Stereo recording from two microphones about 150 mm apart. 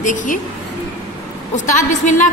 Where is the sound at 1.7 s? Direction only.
55° left (ahead or behind).